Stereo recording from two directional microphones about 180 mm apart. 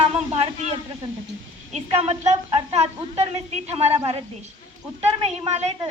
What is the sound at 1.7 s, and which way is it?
A woman's voice, 35° right (ahead or behind).